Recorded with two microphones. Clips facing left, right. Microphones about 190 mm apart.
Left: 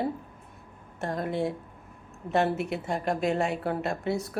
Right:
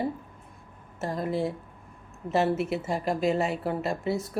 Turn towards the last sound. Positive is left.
turn(degrees=0)  # may be behind; listen again after turning